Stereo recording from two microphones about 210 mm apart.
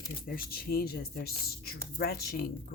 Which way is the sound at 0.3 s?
45° left (ahead or behind).